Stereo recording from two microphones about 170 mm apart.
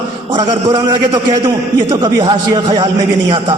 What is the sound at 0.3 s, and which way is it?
A man's voice, 20° right (ahead or behind).